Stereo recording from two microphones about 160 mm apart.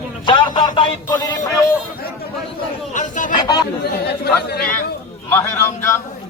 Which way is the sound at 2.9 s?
55° left (ahead or behind).